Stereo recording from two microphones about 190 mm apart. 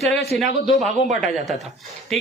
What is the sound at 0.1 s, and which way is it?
Speech, 65° left (ahead or behind).